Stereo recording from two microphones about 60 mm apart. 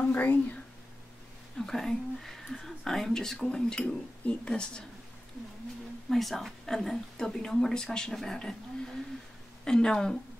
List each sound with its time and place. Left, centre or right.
0.0 s speech: left
1.7 s speech: centre
6.0 s speech: centre
9.7 s speech: centre